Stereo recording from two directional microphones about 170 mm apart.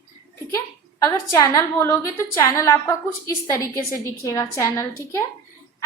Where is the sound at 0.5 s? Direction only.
15° left (ahead or behind).